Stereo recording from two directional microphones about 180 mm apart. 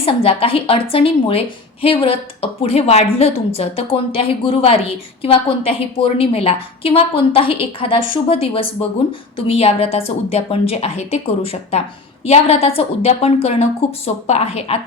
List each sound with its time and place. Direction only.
0.0 s a woman's voice: 30° left (ahead or behind)